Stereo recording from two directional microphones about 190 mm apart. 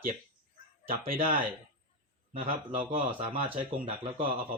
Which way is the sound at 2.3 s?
30° right (ahead or behind).